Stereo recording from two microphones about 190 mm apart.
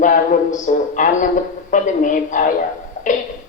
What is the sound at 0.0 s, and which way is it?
A man's voice, 40° left (ahead or behind).